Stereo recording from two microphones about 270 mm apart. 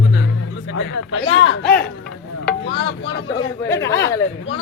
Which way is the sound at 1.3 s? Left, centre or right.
Left.